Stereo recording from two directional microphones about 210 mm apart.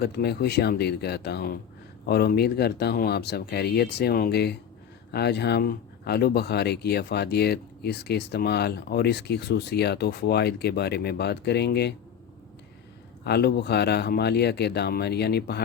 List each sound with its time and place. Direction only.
0.0 s speech: 50° left (ahead or behind)
13.2 s speech: 50° left (ahead or behind)